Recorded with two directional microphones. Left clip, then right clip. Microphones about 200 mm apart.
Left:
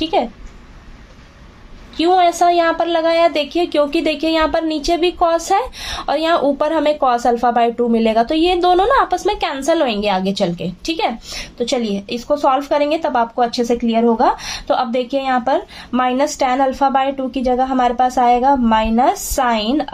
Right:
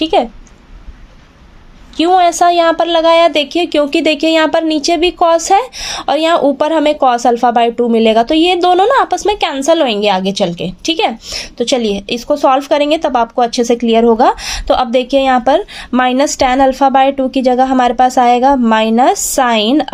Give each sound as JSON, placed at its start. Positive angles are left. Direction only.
{"t": 0.0, "sound": "a woman's voice", "side_deg": -40}
{"t": 2.0, "sound": "a woman's voice", "side_deg": -40}